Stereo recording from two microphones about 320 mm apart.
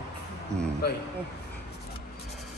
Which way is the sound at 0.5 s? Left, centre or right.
Centre.